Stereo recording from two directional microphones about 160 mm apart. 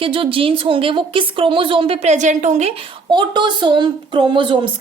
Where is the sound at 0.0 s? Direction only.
35° right (ahead or behind).